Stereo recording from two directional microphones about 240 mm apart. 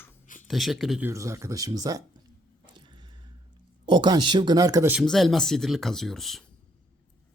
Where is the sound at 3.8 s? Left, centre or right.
Centre.